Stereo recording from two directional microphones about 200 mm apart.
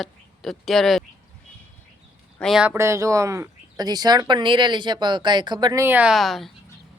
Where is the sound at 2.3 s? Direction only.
Centre (ahead or behind).